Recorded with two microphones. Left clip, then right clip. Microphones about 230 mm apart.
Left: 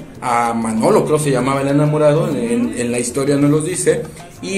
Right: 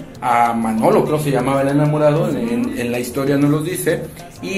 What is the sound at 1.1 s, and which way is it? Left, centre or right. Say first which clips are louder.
Speech: left 2 dB; centre.